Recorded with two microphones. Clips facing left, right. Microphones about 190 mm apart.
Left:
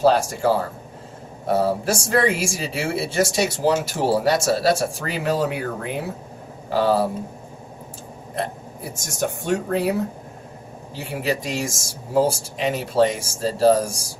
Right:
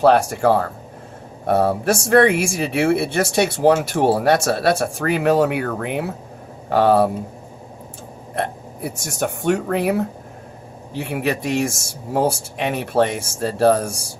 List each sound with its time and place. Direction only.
0.0 s speech: 60° right (ahead or behind)
8.4 s speech: 60° right (ahead or behind)